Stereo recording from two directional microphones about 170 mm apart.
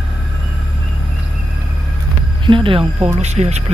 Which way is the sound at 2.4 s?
30° right (ahead or behind).